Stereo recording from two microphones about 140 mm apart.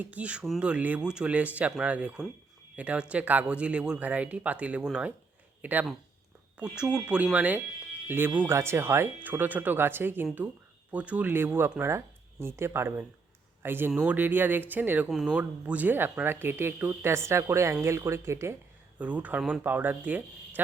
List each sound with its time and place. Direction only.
0.0 s speech: 10° right (ahead or behind)